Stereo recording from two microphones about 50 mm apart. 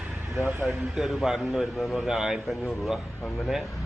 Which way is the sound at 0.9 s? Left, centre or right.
Centre.